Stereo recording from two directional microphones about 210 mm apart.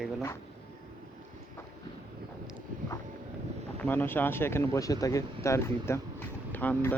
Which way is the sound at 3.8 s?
10° left (ahead or behind).